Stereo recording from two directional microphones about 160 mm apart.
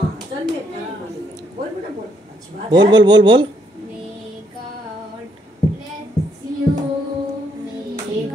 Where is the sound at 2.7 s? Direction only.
25° right (ahead or behind).